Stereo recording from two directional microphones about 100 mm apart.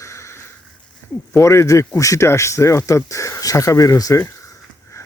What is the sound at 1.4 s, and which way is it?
Speech, 30° left (ahead or behind).